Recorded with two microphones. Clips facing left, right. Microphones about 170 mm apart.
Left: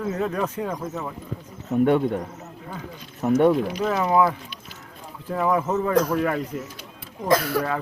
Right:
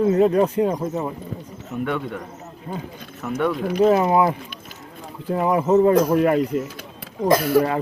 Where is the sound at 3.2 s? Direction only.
30° left (ahead or behind).